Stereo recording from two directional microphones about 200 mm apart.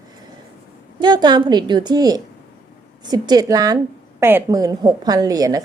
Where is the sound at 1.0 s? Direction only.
20° right (ahead or behind).